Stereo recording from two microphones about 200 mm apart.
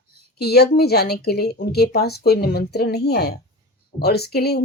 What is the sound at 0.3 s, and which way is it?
A woman's voice, 55° left (ahead or behind).